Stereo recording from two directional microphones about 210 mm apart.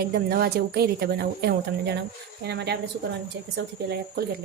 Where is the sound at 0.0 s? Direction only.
45° right (ahead or behind).